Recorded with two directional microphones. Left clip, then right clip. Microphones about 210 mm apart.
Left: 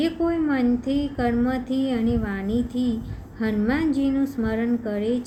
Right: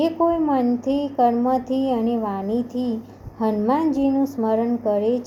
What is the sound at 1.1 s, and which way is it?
Speech, centre (ahead or behind).